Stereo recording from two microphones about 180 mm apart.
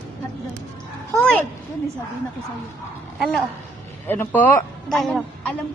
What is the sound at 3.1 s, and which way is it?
Speech, 5° right (ahead or behind).